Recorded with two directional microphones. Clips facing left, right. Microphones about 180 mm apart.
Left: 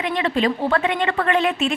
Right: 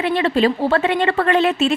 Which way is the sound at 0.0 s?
35° right (ahead or behind).